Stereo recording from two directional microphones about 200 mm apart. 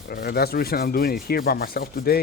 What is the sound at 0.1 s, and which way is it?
Speech, 50° left (ahead or behind).